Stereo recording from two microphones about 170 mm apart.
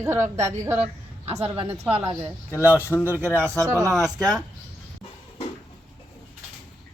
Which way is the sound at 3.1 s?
10° right (ahead or behind).